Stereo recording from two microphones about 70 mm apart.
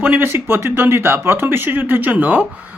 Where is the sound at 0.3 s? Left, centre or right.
Right.